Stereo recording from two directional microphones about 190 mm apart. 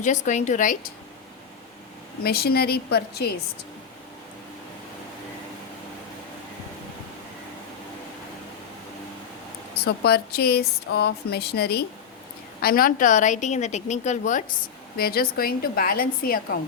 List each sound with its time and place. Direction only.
0.0 s a woman's voice: 40° left (ahead or behind)
2.2 s speech: 55° left (ahead or behind)
9.7 s a woman's voice: 55° left (ahead or behind); by 14.4 s 40° left (ahead or behind)
14.9 s a woman's voice: 55° left (ahead or behind)